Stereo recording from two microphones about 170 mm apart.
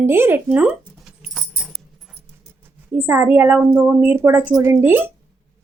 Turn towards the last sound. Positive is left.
turn(degrees=-10)  # may be behind; listen again after turning